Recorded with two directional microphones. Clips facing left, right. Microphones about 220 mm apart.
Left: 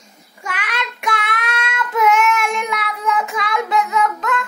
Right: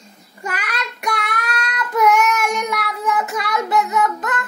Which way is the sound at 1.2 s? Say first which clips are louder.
Left 1 dB; 40° right (ahead or behind).